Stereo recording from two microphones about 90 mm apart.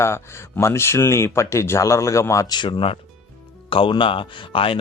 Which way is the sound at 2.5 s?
55° left (ahead or behind).